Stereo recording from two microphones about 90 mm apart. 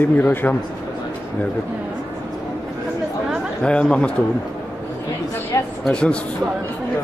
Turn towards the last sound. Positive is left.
turn(degrees=10)  # may be behind; listen again after turning